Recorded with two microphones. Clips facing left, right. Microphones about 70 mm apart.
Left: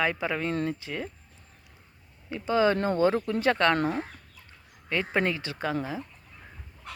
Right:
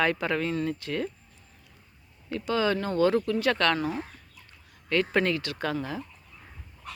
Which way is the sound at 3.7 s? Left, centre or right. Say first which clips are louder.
Left 2 dB; left.